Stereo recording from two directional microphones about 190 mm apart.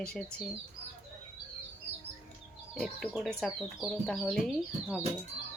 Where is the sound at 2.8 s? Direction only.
Centre (ahead or behind).